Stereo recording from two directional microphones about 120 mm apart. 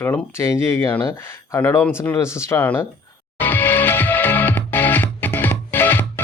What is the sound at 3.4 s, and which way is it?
Music, 15° left (ahead or behind).